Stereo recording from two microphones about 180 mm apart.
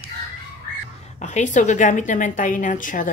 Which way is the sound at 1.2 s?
40° left (ahead or behind).